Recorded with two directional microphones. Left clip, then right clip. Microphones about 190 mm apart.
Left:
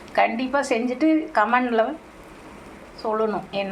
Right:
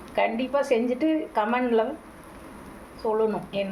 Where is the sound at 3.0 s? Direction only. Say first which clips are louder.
Left 1 dB; 30° left (ahead or behind).